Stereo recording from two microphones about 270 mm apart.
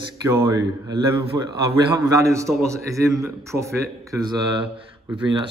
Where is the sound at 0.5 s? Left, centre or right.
Centre.